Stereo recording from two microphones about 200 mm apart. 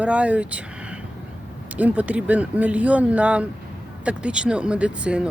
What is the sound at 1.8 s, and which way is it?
Speech, 5° right (ahead or behind).